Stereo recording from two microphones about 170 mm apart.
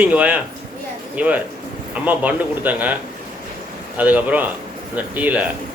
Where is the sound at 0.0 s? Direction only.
10° right (ahead or behind).